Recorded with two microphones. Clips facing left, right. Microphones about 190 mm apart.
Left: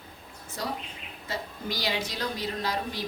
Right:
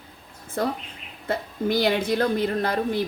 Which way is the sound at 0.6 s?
55° right (ahead or behind).